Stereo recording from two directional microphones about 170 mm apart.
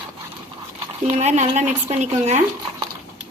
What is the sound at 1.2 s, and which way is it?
A woman's voice, 40° right (ahead or behind).